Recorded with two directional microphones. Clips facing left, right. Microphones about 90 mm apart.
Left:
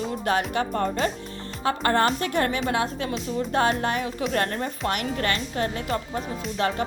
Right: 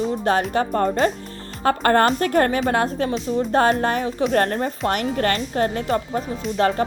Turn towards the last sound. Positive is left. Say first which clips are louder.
# right 5 dB
turn(degrees=-40)  # may be behind; listen again after turning